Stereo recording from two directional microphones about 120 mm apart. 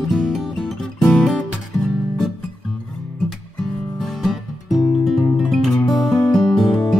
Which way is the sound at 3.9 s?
Centre (ahead or behind).